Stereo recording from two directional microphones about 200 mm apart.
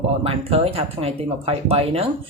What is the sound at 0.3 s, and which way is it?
Speech, 30° right (ahead or behind).